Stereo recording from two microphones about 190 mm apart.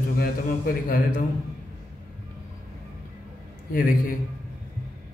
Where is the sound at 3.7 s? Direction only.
50° left (ahead or behind).